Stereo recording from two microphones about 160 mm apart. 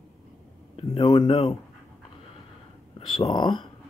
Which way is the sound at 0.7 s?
35° left (ahead or behind).